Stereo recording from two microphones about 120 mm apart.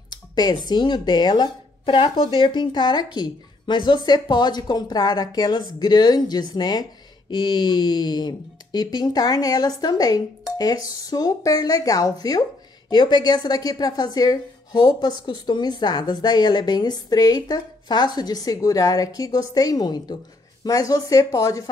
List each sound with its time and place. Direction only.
0.1 s speech: 35° left (ahead or behind)